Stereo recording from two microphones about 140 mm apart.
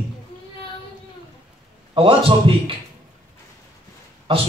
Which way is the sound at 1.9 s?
40° right (ahead or behind).